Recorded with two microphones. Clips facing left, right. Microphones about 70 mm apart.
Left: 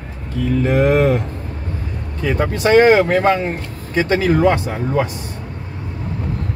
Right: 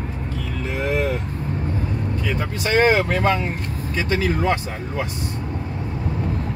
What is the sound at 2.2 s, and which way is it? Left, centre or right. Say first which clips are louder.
Speech: left 12 dB; left.